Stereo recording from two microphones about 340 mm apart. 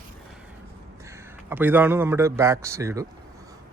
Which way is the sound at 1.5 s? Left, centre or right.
Centre.